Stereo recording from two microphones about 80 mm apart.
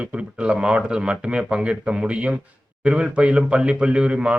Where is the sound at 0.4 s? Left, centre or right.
Centre.